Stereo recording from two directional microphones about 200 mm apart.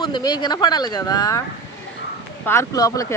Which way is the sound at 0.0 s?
20° left (ahead or behind).